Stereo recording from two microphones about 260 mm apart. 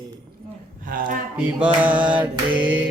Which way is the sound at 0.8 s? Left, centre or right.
Right.